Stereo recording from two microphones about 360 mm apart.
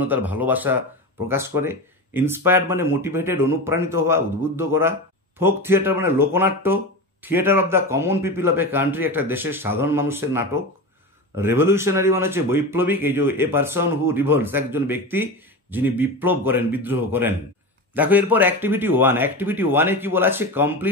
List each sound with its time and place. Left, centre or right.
0.0 s a man's voice: centre